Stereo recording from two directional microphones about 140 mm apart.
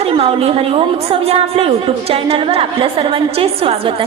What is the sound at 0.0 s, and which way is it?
A woman's voice, 45° right (ahead or behind).